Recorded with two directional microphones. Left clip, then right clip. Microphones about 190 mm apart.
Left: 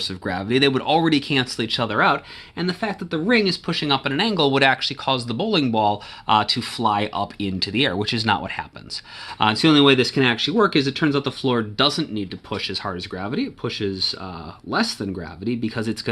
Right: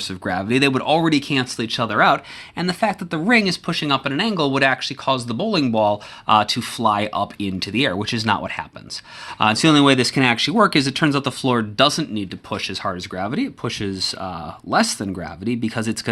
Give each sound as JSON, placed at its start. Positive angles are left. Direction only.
{"t": 0.0, "sound": "speech", "side_deg": -25}